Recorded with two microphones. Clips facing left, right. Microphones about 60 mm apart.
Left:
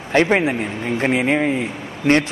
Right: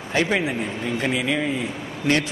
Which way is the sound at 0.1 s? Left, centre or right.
Left.